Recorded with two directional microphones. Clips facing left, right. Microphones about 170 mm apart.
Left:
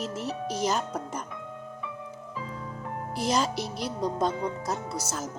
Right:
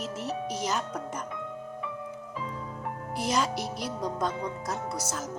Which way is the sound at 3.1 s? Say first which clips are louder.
Left 2 dB; 30° left (ahead or behind).